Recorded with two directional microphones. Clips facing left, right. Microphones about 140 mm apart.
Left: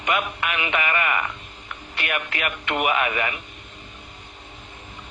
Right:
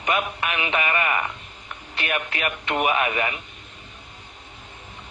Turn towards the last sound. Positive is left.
turn(degrees=-25)  # may be behind; listen again after turning